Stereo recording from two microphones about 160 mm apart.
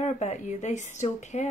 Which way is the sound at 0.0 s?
45° left (ahead or behind).